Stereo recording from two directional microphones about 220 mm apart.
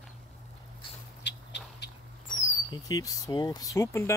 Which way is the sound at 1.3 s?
50° left (ahead or behind).